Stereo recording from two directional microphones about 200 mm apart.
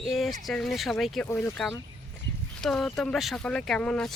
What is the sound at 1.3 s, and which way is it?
Speech, 10° left (ahead or behind).